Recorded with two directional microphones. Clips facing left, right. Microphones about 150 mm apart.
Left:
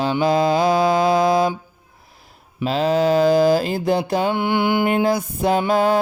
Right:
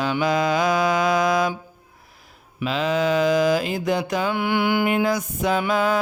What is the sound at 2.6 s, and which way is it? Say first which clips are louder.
Mantra: left 4 dB; 35° left (ahead or behind).